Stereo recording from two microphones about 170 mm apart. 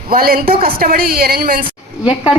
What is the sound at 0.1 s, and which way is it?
A woman's voice, 60° right (ahead or behind).